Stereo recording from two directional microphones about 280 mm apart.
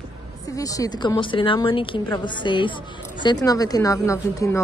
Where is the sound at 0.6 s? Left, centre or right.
Centre.